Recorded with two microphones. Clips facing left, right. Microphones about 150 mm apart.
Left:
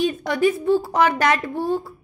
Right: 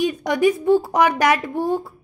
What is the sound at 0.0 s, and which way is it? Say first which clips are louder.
A woman's voice: right 1 dB; 15° right (ahead or behind).